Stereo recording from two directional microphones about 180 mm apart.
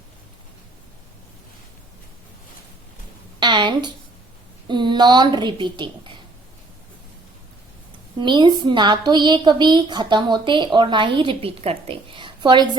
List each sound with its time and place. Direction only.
3.4 s a woman's voice: 25° right (ahead or behind)
8.2 s a woman's voice: 25° right (ahead or behind)